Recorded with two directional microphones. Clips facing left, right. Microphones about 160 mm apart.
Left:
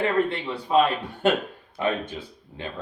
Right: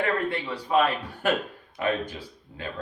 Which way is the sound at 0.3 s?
25° left (ahead or behind).